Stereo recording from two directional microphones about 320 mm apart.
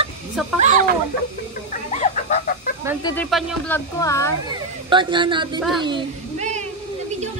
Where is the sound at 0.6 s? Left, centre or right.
Right.